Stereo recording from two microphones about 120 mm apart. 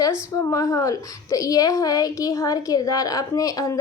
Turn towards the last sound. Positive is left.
turn(degrees=30)  # may be behind; listen again after turning